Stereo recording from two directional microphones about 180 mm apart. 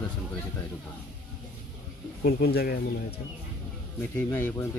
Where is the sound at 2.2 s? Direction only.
60° left (ahead or behind).